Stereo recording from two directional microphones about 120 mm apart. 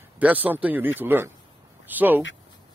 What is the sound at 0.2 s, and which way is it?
Speech, 15° right (ahead or behind).